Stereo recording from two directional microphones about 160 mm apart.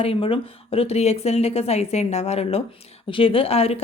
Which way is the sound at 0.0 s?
35° left (ahead or behind).